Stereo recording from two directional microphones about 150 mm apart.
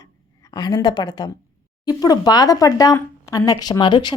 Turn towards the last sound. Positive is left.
turn(degrees=30)  # may be behind; listen again after turning